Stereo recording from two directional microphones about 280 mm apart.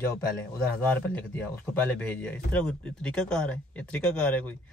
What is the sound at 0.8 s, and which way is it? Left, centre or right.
Speech, centre.